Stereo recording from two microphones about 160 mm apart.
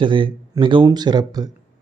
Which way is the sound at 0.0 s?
30° right (ahead or behind).